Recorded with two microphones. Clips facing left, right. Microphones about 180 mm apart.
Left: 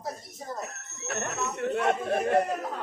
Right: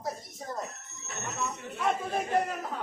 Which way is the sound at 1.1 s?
70° left (ahead or behind).